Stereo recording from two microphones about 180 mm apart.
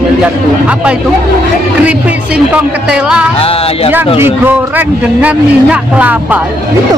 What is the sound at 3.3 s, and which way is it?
Music, 30° left (ahead or behind).